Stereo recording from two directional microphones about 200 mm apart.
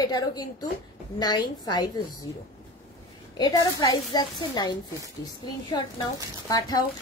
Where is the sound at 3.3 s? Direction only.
20° left (ahead or behind).